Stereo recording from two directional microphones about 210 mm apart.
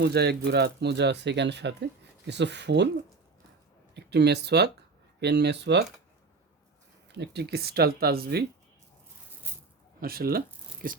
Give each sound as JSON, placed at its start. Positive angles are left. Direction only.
{"t": 0.0, "sound": "speech", "side_deg": -50}
{"t": 3.9, "sound": "speech", "side_deg": -55}
{"t": 7.1, "sound": "speech", "side_deg": -55}
{"t": 10.0, "sound": "speech", "side_deg": -45}